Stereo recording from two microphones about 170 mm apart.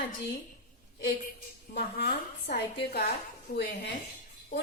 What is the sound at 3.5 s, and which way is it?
Speech, 50° left (ahead or behind).